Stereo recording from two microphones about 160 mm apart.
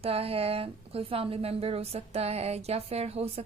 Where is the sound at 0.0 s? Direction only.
40° right (ahead or behind).